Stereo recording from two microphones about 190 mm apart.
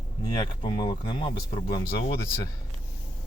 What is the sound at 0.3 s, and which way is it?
Speech, 25° left (ahead or behind).